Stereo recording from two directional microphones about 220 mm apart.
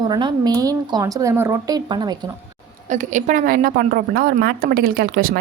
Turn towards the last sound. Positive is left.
turn(degrees=-40)  # may be behind; listen again after turning